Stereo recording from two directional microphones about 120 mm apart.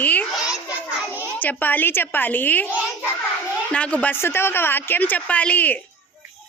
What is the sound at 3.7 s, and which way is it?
Speech, 10° left (ahead or behind).